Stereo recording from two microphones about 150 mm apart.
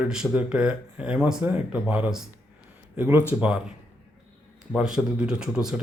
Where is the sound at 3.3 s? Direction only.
5° right (ahead or behind).